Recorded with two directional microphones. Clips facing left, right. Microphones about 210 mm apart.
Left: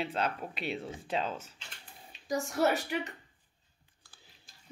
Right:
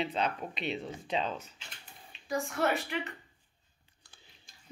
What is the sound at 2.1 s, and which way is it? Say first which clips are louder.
Speech: left 1 dB; 40° left (ahead or behind).